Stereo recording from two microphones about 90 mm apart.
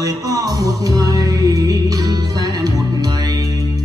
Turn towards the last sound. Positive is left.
turn(degrees=-40)  # may be behind; listen again after turning